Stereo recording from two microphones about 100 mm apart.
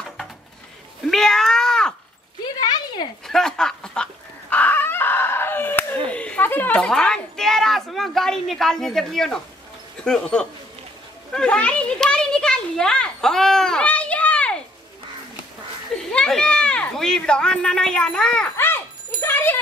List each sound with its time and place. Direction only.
1.0 s cat: 5° left (ahead or behind)
2.4 s a sound: 45° left (ahead or behind)
3.3 s chicken: 5° left (ahead or behind)
10.0 s a child's voice: 5° left (ahead or behind)
16.1 s speech: 10° left (ahead or behind)
19.2 s a sound: 20° left (ahead or behind)